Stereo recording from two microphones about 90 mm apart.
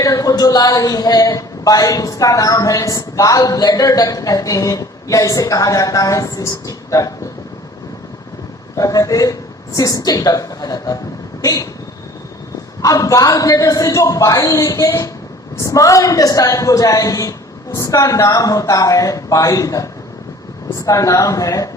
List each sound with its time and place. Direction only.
0.0 s speech: 40° left (ahead or behind)
8.7 s a woman's voice: 40° left (ahead or behind)
12.8 s speech: 40° left (ahead or behind)